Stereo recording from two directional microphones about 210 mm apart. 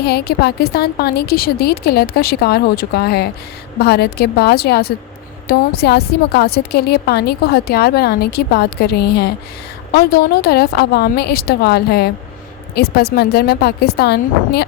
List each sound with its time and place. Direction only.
0.0 s a woman's voice: 50° left (ahead or behind)